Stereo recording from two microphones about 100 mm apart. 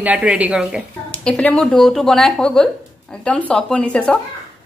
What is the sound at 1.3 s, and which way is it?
A woman's voice, 10° left (ahead or behind).